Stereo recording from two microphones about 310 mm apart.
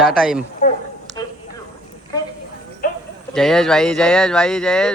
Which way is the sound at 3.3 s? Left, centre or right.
Centre.